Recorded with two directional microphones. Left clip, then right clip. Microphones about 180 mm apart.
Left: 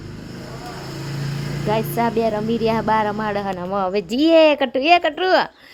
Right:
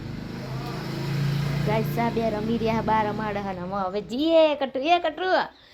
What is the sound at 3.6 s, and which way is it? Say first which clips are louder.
A woman's voice: left 7 dB; 45° left (ahead or behind).